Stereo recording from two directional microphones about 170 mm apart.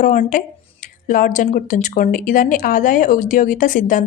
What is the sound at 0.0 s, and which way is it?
Speech, 50° left (ahead or behind).